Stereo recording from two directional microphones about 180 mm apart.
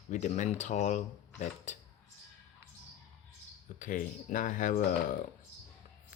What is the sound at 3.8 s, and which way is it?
Speech, 50° left (ahead or behind).